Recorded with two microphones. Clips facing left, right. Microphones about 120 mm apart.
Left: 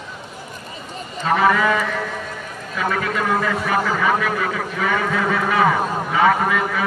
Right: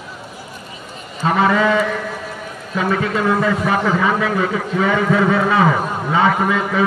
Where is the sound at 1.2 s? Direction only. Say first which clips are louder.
Right 2 dB; 30° right (ahead or behind).